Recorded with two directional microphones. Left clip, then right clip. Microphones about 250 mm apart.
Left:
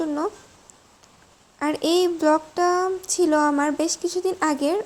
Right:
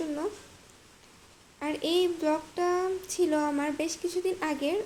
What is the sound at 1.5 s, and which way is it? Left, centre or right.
A child's voice, left.